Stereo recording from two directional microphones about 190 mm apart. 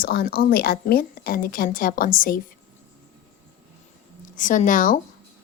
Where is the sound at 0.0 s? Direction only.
50° left (ahead or behind).